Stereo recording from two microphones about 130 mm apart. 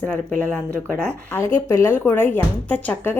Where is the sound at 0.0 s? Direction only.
10° left (ahead or behind).